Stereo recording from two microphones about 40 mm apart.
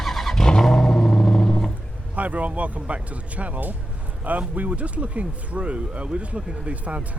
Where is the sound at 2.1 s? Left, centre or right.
Right.